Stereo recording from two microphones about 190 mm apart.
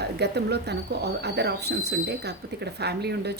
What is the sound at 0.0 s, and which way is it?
A woman's voice, 60° right (ahead or behind).